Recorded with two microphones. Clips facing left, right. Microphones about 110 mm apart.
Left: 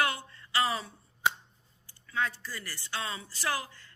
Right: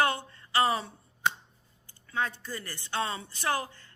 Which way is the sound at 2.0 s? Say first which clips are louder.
Right 1 dB; 25° right (ahead or behind).